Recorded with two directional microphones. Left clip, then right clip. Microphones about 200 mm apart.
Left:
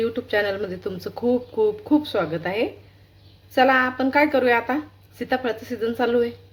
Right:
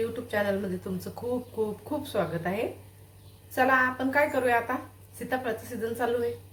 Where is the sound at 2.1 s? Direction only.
50° left (ahead or behind).